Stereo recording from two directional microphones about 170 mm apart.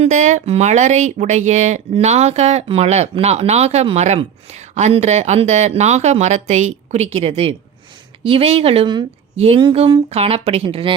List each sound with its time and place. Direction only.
0.0 s speech: 45° right (ahead or behind)